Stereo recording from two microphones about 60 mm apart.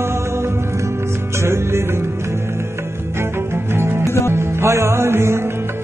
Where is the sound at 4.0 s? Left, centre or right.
Left.